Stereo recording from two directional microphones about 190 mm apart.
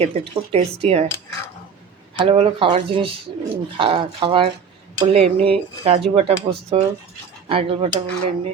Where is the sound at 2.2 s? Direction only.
30° right (ahead or behind).